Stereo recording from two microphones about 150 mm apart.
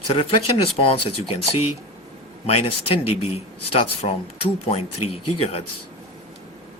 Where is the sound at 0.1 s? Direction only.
40° left (ahead or behind).